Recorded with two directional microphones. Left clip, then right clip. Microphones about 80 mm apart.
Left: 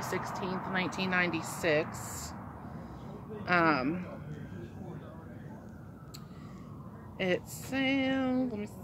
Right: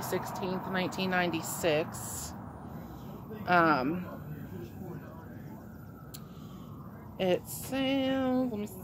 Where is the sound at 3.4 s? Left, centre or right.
Right.